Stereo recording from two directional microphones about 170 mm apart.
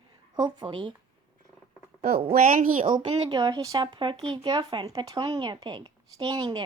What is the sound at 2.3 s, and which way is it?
Speech, 55° right (ahead or behind).